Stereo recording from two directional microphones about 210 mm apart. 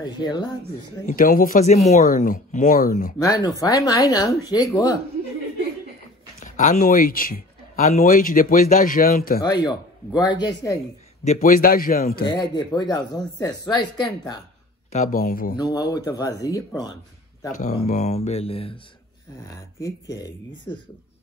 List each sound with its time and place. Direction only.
0.0 s speech: 20° left (ahead or behind)
1.0 s speech: 40° left (ahead or behind)
3.3 s speech: 15° left (ahead or behind)
6.4 s speech: 35° left (ahead or behind)
9.4 s speech: 20° left (ahead or behind)
11.2 s a man's voice: 40° left (ahead or behind)
12.2 s speech: 20° left (ahead or behind)
14.9 s speech: 35° left (ahead or behind)
15.5 s speech: 15° left (ahead or behind)
17.8 s speech: 35° left (ahead or behind)
19.4 s speech: 15° left (ahead or behind)